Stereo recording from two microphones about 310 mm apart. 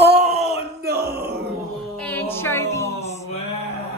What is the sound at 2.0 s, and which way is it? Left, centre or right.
Music, centre.